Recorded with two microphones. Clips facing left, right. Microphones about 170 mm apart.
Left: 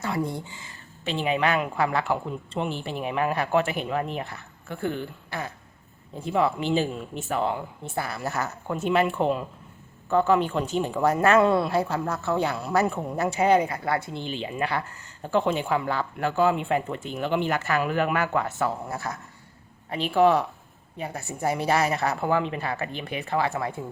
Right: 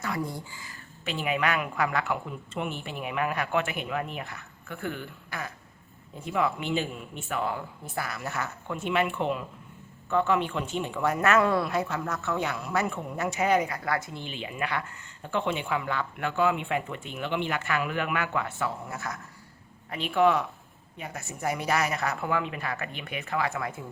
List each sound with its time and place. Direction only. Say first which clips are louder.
0.0 s speech: left 4 dB; 25° left (ahead or behind)